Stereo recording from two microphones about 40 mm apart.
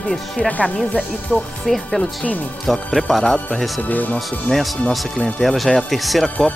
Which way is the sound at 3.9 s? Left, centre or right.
Left.